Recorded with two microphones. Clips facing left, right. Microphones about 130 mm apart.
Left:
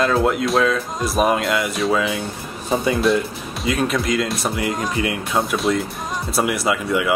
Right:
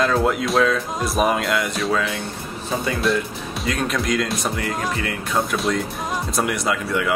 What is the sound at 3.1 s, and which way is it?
Speech, centre (ahead or behind).